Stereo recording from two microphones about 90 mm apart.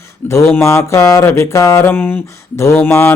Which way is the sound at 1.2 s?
30° left (ahead or behind).